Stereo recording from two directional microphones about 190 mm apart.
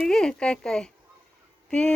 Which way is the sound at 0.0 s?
5° left (ahead or behind).